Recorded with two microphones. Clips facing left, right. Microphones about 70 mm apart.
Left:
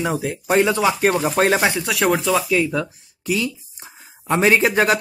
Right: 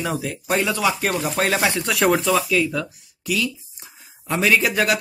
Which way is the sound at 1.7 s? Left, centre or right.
Centre.